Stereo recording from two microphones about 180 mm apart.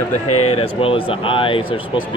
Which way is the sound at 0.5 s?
30° left (ahead or behind).